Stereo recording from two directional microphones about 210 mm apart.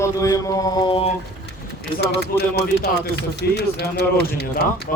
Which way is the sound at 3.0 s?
55° left (ahead or behind).